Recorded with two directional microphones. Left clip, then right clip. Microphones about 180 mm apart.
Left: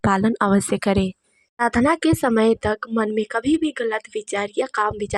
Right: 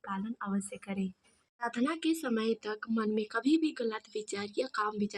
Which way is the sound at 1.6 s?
40° left (ahead or behind).